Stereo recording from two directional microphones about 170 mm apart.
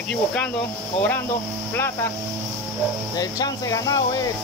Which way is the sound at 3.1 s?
20° left (ahead or behind).